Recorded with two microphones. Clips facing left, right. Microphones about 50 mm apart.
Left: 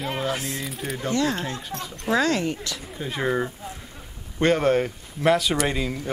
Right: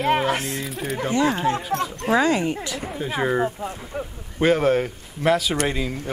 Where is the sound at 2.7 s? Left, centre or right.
Centre.